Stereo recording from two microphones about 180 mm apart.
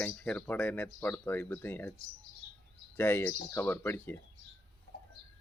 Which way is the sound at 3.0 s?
10° left (ahead or behind).